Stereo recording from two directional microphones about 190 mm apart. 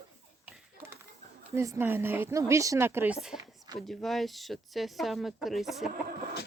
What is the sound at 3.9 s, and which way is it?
Speech, centre (ahead or behind).